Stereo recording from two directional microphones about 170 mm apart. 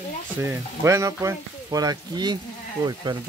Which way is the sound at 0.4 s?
15° right (ahead or behind).